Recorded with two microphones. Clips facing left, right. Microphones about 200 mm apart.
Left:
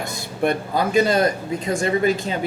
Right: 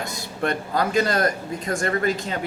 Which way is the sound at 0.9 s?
25° left (ahead or behind).